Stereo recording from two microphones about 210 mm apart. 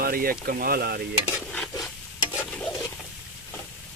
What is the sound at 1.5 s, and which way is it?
Stir, centre (ahead or behind).